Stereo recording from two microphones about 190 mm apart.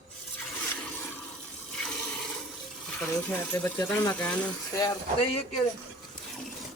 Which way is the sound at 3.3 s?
15° left (ahead or behind).